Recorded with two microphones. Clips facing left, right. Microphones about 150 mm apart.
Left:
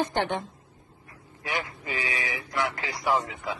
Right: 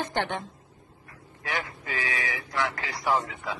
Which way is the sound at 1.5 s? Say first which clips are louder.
Left 1 dB; 10° left (ahead or behind).